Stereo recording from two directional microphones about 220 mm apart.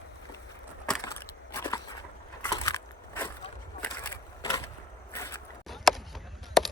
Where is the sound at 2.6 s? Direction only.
10° left (ahead or behind).